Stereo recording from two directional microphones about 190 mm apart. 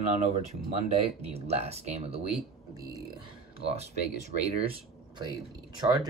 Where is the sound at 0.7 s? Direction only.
35° right (ahead or behind).